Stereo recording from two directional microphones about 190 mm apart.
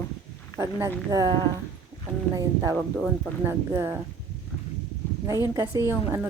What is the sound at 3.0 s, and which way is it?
Speech, 10° right (ahead or behind).